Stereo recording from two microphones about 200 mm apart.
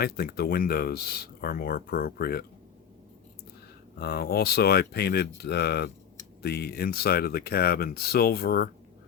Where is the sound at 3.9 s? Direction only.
55° left (ahead or behind).